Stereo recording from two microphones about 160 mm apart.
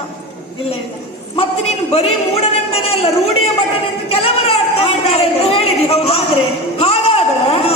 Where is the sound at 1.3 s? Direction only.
40° left (ahead or behind).